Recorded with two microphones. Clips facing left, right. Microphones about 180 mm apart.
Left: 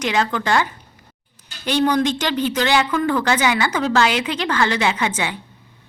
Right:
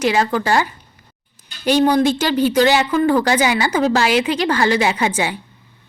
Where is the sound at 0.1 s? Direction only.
35° right (ahead or behind).